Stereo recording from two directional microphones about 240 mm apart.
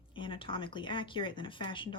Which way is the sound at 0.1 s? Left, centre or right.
Left.